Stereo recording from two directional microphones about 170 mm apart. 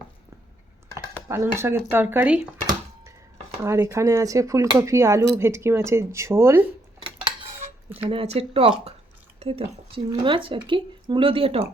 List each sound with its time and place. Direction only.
1.3 s speech: 15° right (ahead or behind)
3.6 s speech: 15° right (ahead or behind)
7.9 s speech: 35° right (ahead or behind)